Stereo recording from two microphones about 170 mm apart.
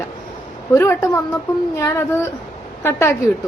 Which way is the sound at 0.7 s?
15° left (ahead or behind).